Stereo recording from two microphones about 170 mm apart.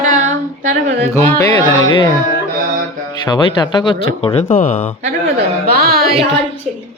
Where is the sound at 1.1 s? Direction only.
10° left (ahead or behind).